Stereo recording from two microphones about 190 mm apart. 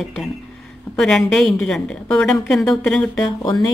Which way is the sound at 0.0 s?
Centre (ahead or behind).